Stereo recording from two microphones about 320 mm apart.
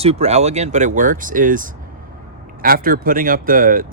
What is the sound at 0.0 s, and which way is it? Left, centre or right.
Speech, centre.